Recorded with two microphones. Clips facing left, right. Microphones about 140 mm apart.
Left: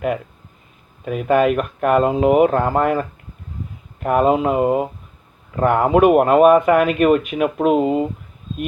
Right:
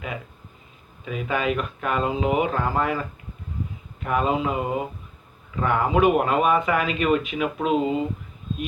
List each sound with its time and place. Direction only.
1.0 s speech: 55° left (ahead or behind)
4.0 s speech: 50° left (ahead or behind)